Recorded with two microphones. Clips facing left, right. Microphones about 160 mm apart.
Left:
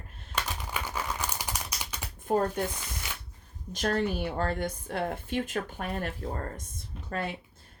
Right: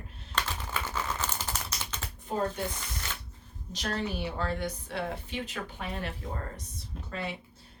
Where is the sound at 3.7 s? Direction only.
50° left (ahead or behind).